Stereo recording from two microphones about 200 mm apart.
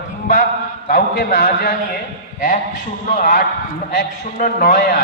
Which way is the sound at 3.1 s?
45° left (ahead or behind).